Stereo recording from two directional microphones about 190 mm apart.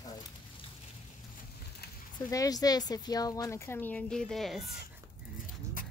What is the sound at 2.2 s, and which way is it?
Speech, 20° left (ahead or behind).